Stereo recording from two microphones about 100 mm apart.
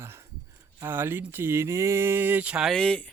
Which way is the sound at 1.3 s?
25° right (ahead or behind).